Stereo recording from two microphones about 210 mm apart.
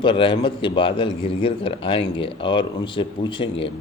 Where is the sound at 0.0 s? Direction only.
25° left (ahead or behind).